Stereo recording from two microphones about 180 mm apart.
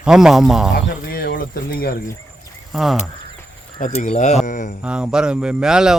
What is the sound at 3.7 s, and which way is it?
Speech, 45° left (ahead or behind).